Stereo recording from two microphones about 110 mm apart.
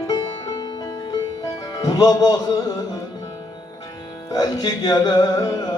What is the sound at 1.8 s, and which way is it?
Speech, 35° left (ahead or behind).